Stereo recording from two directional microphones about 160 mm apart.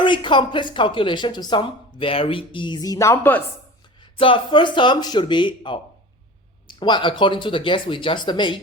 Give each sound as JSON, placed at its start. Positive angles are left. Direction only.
{"t": 0.0, "sound": "speech", "side_deg": 30}
{"t": 4.0, "sound": "speech", "side_deg": 30}